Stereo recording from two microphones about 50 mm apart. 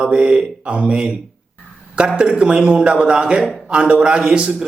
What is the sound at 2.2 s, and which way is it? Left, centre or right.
A man's voice, right.